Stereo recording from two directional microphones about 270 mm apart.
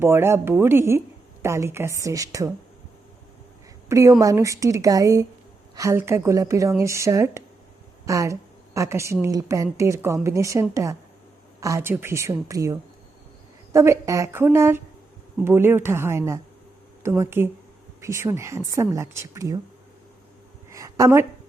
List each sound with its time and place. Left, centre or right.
0.0 s speech: centre
3.8 s a woman's voice: centre
20.7 s a sound: centre